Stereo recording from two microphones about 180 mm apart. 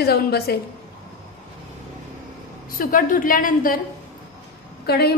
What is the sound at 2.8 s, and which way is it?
Speech, 50° left (ahead or behind).